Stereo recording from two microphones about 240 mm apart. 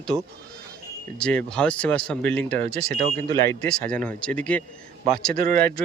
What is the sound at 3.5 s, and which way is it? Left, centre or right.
Speech, centre.